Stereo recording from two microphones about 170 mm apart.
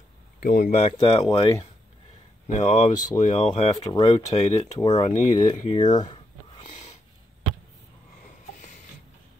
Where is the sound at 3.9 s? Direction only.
25° left (ahead or behind).